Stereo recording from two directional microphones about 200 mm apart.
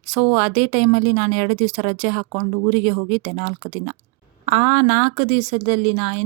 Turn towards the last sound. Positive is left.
turn(degrees=-30)  # may be behind; listen again after turning